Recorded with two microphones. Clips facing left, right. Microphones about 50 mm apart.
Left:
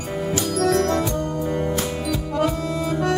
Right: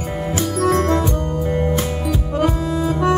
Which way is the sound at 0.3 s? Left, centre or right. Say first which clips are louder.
Right 2 dB; right.